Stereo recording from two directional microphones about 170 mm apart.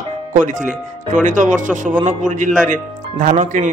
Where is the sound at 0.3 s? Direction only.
50° right (ahead or behind).